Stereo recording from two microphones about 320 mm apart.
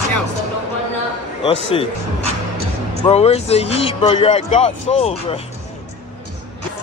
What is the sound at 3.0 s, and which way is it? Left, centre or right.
A man's voice, centre.